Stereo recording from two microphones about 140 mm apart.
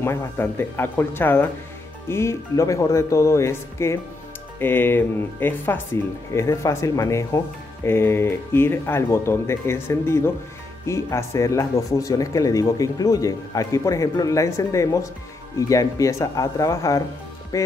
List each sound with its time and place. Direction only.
0.0 s speech: 15° left (ahead or behind)